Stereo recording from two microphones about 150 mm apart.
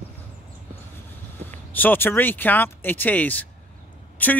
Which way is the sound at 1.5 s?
10° left (ahead or behind).